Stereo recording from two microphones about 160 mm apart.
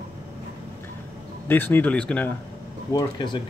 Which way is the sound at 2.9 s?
25° left (ahead or behind).